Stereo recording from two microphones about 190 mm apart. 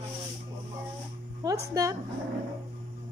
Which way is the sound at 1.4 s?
15° right (ahead or behind).